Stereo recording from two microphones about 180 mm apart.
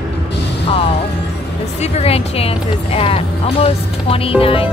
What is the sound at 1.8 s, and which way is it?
Speech, 35° left (ahead or behind).